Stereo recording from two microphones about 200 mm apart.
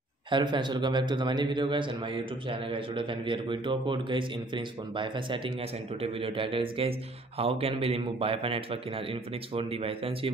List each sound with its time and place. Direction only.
0.3 s a man's voice: 25° right (ahead or behind)